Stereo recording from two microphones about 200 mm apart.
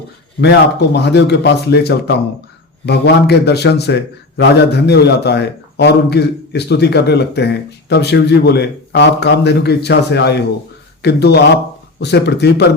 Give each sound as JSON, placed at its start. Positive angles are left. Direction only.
{"t": 0.9, "sound": "a man's voice", "side_deg": 55}